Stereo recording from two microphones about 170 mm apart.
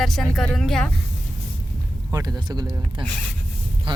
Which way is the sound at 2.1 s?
20° right (ahead or behind).